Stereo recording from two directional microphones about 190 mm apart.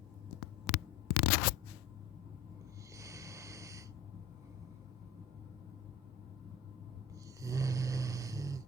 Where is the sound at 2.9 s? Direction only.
15° right (ahead or behind).